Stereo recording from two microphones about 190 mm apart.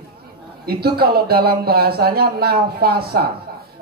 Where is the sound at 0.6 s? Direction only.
55° right (ahead or behind).